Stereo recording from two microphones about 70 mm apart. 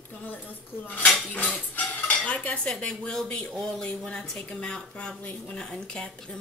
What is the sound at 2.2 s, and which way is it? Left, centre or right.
Speech, centre.